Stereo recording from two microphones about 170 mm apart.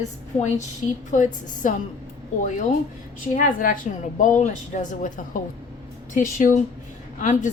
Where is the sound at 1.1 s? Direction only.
50° left (ahead or behind).